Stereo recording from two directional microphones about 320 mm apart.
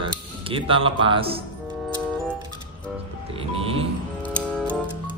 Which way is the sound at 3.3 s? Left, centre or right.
Centre.